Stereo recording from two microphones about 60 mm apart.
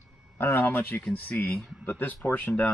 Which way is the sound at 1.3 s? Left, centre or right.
Left.